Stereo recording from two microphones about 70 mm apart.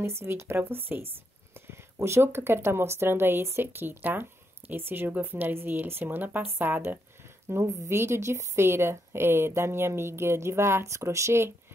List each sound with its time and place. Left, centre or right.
0.0 s speech: right